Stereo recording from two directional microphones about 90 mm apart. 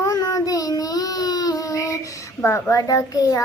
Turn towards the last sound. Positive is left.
turn(degrees=40)  # may be behind; listen again after turning